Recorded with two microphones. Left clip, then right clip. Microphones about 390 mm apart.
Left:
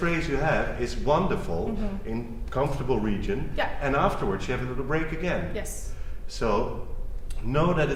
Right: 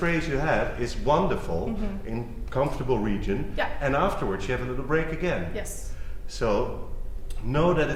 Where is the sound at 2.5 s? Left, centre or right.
Right.